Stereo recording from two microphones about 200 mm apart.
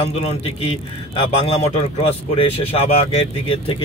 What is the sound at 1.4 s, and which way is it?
Speech, 30° left (ahead or behind).